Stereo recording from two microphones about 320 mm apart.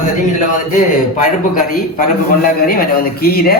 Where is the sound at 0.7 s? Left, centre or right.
Left.